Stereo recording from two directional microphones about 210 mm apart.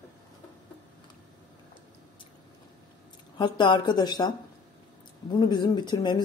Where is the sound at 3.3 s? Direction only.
20° left (ahead or behind).